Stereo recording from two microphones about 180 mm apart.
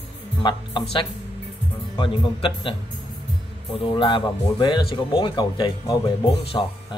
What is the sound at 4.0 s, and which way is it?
Speech, 25° left (ahead or behind).